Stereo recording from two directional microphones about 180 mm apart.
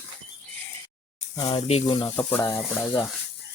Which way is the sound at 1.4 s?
35° left (ahead or behind).